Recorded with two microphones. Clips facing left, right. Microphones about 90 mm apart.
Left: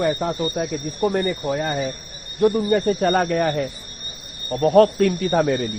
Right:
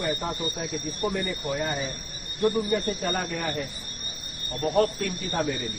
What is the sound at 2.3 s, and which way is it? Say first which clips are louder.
Speech: left 7 dB; 65° left (ahead or behind).